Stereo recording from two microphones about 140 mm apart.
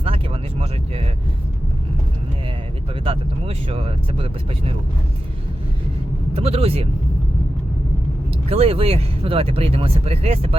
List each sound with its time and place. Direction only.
3.0 s speech: 40° right (ahead or behind)
6.3 s speech: 45° right (ahead or behind)
8.4 s speech: 45° right (ahead or behind)